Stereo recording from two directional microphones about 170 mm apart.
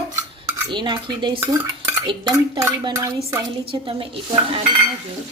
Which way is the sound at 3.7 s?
30° right (ahead or behind).